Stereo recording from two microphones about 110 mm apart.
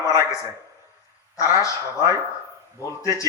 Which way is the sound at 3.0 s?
30° left (ahead or behind).